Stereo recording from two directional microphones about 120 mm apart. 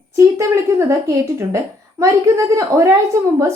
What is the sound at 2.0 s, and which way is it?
Speech, 25° right (ahead or behind).